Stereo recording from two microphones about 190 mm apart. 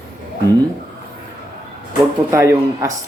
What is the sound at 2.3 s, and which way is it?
Speech, 15° right (ahead or behind).